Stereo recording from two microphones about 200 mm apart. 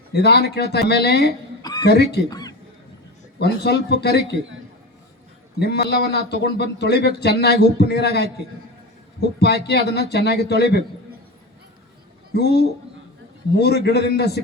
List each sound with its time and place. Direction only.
0.1 s a man's voice: 55° left (ahead or behind)
2.3 s a sound: 20° left (ahead or behind)
3.3 s a man's voice: 55° left (ahead or behind)
5.5 s a man's voice: 55° left (ahead or behind)
9.4 s a man's voice: 55° left (ahead or behind)
12.4 s a man's voice: 55° left (ahead or behind)